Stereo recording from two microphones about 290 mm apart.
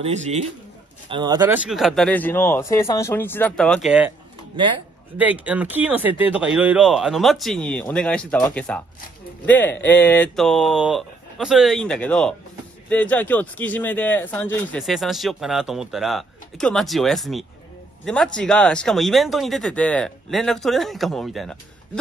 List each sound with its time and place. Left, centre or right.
0.0 s a man's voice: right; by 4.1 s centre
5.1 s speech: centre